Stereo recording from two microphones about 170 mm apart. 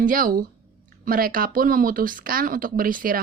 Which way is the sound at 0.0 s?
55° right (ahead or behind).